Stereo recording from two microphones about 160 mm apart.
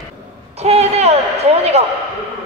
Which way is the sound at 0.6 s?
40° right (ahead or behind).